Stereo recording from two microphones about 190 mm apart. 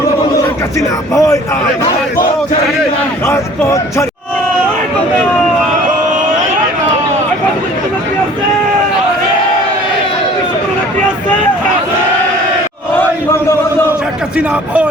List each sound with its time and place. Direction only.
0.8 s speech: 15° left (ahead or behind)
3.2 s speech: 15° left (ahead or behind)
13.0 s a sound: 15° left (ahead or behind)
14.3 s a man's voice: 5° right (ahead or behind)